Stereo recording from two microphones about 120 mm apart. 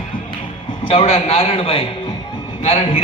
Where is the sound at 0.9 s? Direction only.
55° left (ahead or behind).